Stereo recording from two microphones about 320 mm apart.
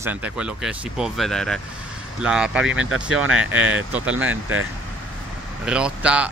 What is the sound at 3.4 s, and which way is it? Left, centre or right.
Speech, centre.